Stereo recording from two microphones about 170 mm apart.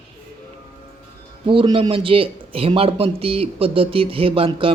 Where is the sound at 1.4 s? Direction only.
30° right (ahead or behind).